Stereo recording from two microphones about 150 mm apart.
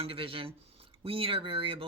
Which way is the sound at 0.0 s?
35° right (ahead or behind).